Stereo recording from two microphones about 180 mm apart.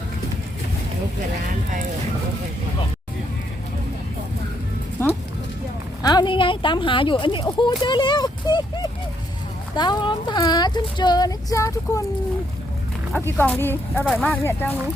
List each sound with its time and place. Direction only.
5.0 s music: 15° left (ahead or behind)
6.0 s speech: 20° left (ahead or behind)
13.1 s speech: 10° left (ahead or behind)